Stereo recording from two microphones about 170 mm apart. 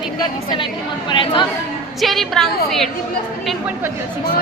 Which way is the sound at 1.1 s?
30° left (ahead or behind).